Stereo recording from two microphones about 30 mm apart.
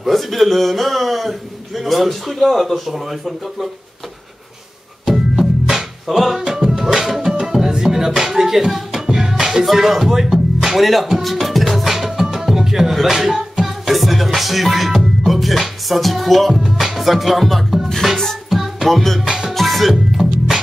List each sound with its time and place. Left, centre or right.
0.0 s speech: centre
5.0 s music: centre
6.4 s music: right
10.8 s speech: centre
11.3 s music: centre
15.9 s speech: centre
16.7 s music: centre
18.0 s music: centre
18.9 s speech: centre
19.2 s music: centre
19.5 s music: centre
20.2 s music: centre